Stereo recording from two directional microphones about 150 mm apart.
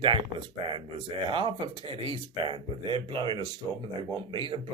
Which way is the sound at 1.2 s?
35° right (ahead or behind).